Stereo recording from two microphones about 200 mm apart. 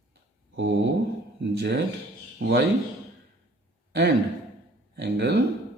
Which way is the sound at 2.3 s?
60° right (ahead or behind).